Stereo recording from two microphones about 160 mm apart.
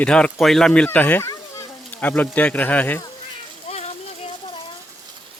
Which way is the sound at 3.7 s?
40° left (ahead or behind).